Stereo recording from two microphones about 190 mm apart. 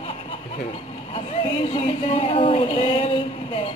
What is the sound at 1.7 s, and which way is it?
Speech, 30° left (ahead or behind).